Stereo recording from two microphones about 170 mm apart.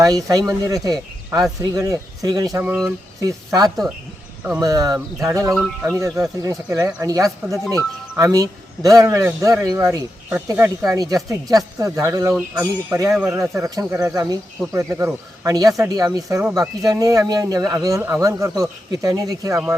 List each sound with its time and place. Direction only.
0.0 s speech: 20° right (ahead or behind)
5.5 s speech: centre (ahead or behind)
6.4 s speech: 20° right (ahead or behind)
7.3 s speech: centre (ahead or behind)
7.7 s speech: 20° right (ahead or behind)
13.1 s speech: 5° right (ahead or behind)
13.6 s speech: 20° right (ahead or behind)